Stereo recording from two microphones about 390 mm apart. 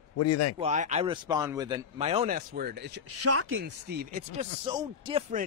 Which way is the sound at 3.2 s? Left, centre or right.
Right.